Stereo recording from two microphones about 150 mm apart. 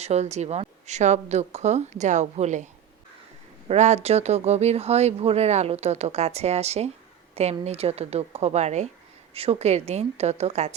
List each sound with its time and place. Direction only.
0.0 s speech: 45° right (ahead or behind)
3.7 s speech: 50° right (ahead or behind)